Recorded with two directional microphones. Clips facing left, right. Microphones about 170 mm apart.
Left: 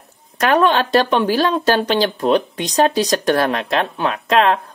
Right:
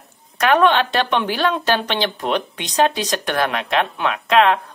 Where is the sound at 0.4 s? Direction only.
35° left (ahead or behind).